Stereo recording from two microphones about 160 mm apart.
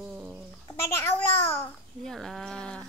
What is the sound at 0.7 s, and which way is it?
Speech, 15° left (ahead or behind).